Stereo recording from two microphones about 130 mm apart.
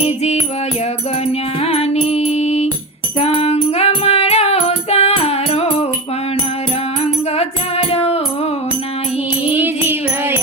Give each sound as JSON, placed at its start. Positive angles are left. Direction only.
{"t": 0.0, "sound": "music", "side_deg": 55}
{"t": 7.3, "sound": "music", "side_deg": 50}
{"t": 9.5, "sound": "music", "side_deg": -15}